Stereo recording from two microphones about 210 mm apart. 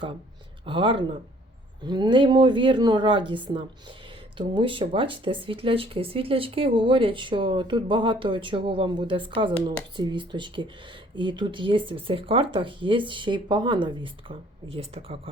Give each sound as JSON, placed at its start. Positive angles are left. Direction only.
{"t": 0.6, "sound": "speech", "side_deg": -25}